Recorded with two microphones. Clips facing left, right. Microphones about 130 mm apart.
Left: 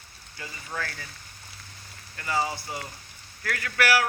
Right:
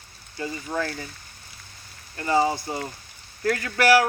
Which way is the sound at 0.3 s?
30° right (ahead or behind).